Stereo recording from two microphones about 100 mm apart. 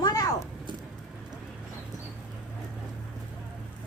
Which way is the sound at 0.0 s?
35° left (ahead or behind).